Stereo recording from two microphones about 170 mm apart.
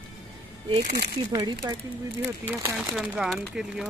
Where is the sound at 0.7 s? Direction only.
40° right (ahead or behind).